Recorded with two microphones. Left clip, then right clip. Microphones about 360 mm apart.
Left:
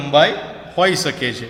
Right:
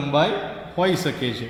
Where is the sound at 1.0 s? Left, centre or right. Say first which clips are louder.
Left 5 dB; centre.